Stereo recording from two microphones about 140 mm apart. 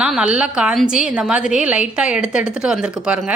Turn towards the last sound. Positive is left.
turn(degrees=-5)  # may be behind; listen again after turning